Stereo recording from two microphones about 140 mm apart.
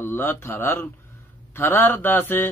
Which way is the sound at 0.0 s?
15° left (ahead or behind).